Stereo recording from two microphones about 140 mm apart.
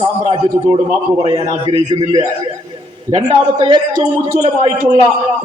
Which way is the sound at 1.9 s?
35° right (ahead or behind).